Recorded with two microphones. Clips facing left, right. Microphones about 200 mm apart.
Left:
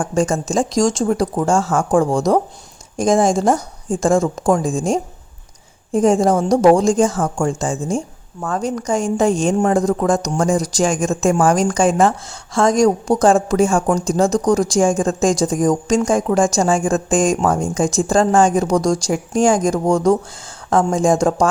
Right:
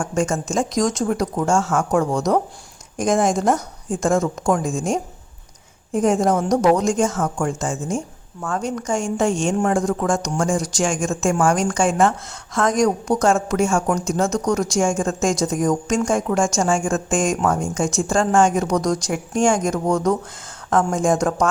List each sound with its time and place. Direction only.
0.0 s a woman's voice: 35° left (ahead or behind)